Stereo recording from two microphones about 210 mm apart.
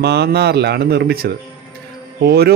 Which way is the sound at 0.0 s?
50° right (ahead or behind).